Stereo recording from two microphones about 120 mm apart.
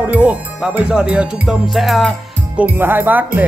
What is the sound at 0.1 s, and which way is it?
Music, 10° right (ahead or behind).